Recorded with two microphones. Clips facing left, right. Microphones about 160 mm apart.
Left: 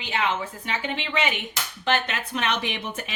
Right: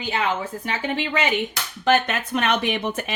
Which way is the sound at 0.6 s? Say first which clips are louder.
Right 4 dB; 40° right (ahead or behind).